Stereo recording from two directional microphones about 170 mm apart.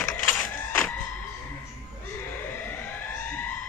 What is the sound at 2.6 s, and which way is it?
Emergency vehicle, 10° left (ahead or behind).